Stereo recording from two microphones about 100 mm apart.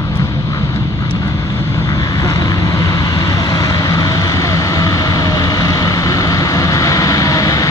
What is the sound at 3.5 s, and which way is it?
Vehicle, 40° left (ahead or behind).